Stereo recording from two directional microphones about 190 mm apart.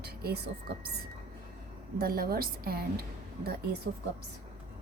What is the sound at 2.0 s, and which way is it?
A woman's voice, 50° right (ahead or behind).